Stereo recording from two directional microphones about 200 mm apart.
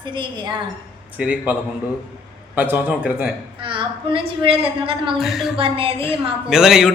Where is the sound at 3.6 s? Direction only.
25° right (ahead or behind).